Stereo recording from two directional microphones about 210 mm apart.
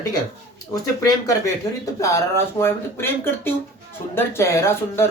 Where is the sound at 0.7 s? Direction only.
15° left (ahead or behind).